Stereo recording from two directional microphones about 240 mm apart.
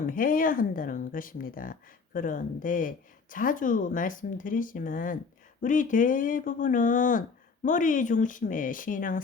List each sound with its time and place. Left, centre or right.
0.0 s speech: left